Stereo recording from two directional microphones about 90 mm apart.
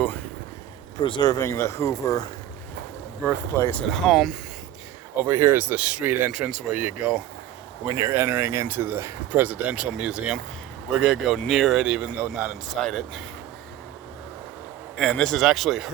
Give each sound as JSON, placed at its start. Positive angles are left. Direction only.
{"t": 1.2, "sound": "speech", "side_deg": 40}
{"t": 3.2, "sound": "speech", "side_deg": 25}
{"t": 3.8, "sound": "speech", "side_deg": 0}
{"t": 5.1, "sound": "speech", "side_deg": -25}
{"t": 6.5, "sound": "speech", "side_deg": -10}
{"t": 9.4, "sound": "speech", "side_deg": -15}
{"t": 11.8, "sound": "speech", "side_deg": -10}
{"t": 15.1, "sound": "speech", "side_deg": 5}